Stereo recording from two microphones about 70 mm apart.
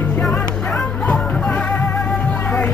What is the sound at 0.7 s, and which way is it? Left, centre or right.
Music, centre.